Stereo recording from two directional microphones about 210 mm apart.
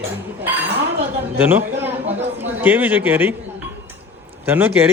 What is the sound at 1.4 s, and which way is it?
A man's voice, 10° right (ahead or behind).